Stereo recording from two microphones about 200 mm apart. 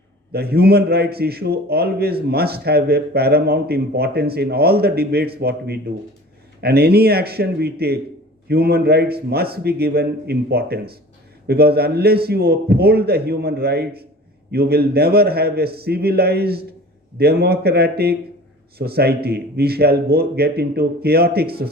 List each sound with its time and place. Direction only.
0.3 s a man's voice: 50° right (ahead or behind)